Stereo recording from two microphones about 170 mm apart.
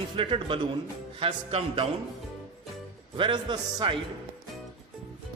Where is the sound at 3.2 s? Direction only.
25° right (ahead or behind).